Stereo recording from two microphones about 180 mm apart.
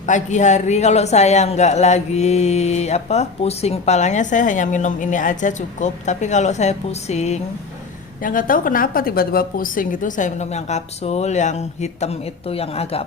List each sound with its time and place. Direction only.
0.0 s speech: 45° left (ahead or behind)
8.2 s a woman's voice: 50° left (ahead or behind); by 13.1 s 35° left (ahead or behind)